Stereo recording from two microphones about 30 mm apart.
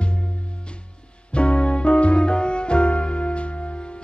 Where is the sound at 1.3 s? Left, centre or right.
Left.